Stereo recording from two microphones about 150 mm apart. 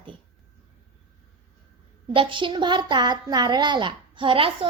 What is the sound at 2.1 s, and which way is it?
A woman's voice, 35° right (ahead or behind).